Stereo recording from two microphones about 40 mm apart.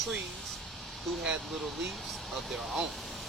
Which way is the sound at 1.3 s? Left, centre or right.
Centre.